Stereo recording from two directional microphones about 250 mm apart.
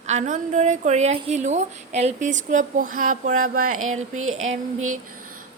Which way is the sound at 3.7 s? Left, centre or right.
Right.